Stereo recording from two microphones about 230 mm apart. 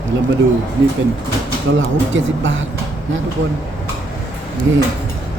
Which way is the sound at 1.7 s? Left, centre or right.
Right.